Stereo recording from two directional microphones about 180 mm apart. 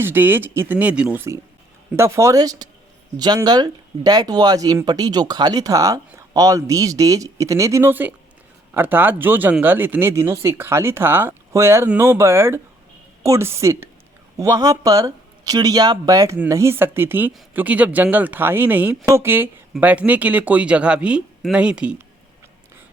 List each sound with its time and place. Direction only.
0.0 s speech: 10° right (ahead or behind)